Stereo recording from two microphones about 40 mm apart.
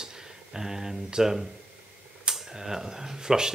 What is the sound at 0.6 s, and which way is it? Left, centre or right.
Speech, centre.